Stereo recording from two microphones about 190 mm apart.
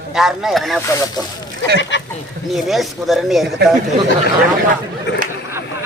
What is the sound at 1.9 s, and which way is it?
Duck, 70° left (ahead or behind).